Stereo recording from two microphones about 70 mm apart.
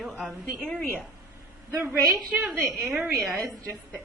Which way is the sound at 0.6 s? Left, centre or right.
Centre.